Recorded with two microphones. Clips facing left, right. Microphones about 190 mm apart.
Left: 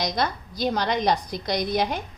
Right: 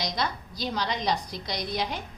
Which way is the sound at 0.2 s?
50° left (ahead or behind).